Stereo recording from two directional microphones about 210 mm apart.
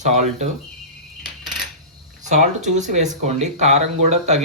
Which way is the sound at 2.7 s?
35° right (ahead or behind).